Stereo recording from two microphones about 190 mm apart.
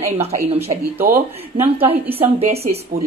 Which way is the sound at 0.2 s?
30° right (ahead or behind).